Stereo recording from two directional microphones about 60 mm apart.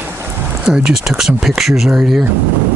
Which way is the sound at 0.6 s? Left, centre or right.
Centre.